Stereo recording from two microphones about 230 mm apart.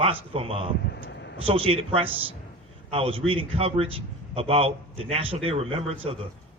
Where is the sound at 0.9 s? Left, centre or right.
Left.